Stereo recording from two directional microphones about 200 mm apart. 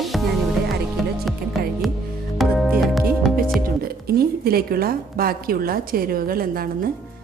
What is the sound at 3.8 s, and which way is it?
A woman's voice, 50° right (ahead or behind).